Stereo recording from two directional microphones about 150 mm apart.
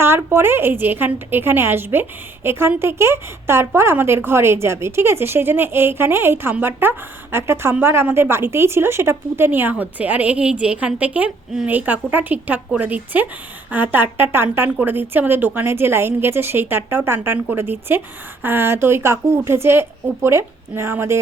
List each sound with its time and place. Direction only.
0.0 s a woman's voice: 15° right (ahead or behind)